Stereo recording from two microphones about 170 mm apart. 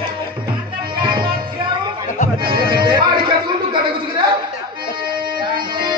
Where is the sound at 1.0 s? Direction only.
30° right (ahead or behind).